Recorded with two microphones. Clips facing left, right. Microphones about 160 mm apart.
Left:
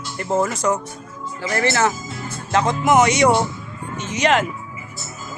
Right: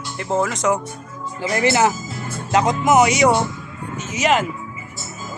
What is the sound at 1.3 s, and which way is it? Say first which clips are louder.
Speech: right 2 dB; 15° right (ahead or behind).